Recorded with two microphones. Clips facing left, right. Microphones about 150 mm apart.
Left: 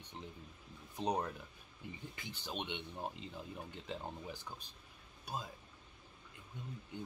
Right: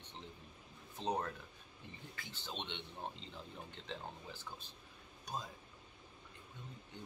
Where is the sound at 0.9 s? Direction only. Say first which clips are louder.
Left 2 dB; 15° left (ahead or behind).